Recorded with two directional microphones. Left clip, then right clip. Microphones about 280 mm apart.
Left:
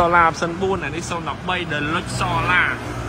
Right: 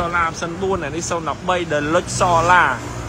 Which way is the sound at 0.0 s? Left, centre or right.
Centre.